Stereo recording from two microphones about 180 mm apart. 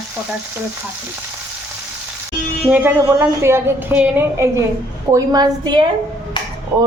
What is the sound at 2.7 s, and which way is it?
A woman's voice, 10° right (ahead or behind).